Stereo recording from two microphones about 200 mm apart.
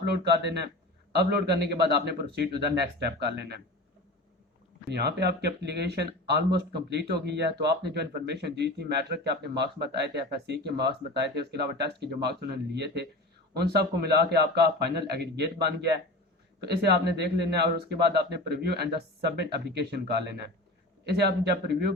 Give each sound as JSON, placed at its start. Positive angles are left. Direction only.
{"t": 0.0, "sound": "speech", "side_deg": -55}
{"t": 4.9, "sound": "a man's voice", "side_deg": -55}